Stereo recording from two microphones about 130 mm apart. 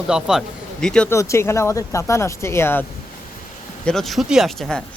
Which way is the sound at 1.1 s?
20° left (ahead or behind).